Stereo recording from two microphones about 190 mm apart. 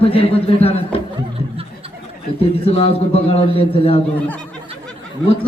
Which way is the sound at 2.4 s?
30° left (ahead or behind).